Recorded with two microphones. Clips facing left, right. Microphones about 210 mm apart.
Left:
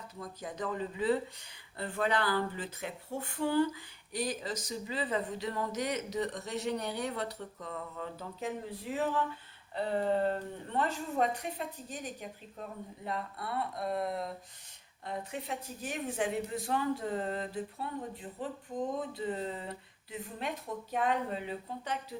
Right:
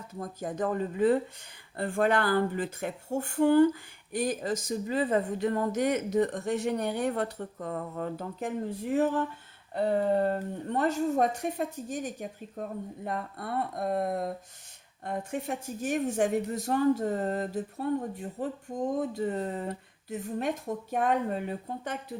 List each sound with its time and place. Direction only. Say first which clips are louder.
0.1 s speech: right 8 dB; 50° right (ahead or behind)